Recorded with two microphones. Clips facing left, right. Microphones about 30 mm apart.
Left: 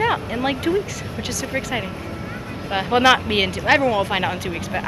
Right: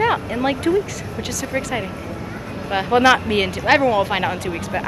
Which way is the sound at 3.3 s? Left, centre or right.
Left.